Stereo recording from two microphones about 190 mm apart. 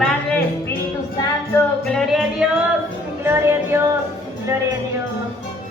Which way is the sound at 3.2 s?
15° right (ahead or behind).